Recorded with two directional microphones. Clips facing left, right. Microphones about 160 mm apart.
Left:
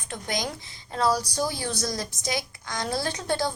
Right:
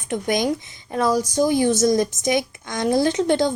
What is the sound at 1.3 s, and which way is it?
A woman's voice, 20° right (ahead or behind).